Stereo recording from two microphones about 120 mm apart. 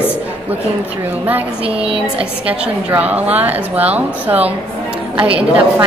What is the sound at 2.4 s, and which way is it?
A woman's voice, 10° right (ahead or behind).